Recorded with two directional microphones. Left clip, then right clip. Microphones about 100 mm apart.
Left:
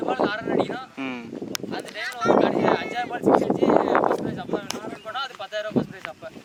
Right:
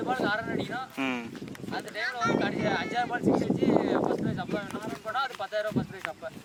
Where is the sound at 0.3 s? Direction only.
5° left (ahead or behind).